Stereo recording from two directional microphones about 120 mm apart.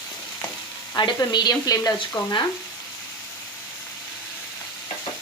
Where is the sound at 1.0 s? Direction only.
35° left (ahead or behind).